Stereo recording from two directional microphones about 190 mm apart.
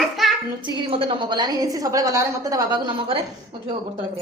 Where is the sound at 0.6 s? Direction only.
25° right (ahead or behind).